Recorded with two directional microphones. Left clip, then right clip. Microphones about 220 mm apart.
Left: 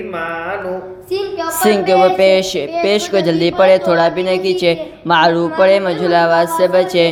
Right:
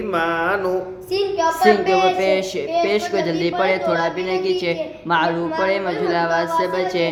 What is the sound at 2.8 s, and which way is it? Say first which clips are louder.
Speech: left 6 dB; 30° left (ahead or behind).